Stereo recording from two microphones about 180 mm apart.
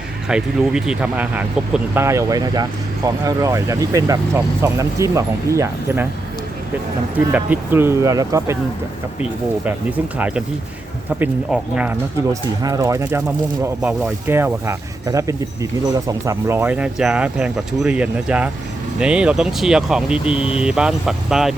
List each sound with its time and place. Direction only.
0.3 s speech: 5° right (ahead or behind)
2.0 s speech: 20° right (ahead or behind)
7.3 s speech: 10° right (ahead or behind)
10.2 s speech: 5° right (ahead or behind)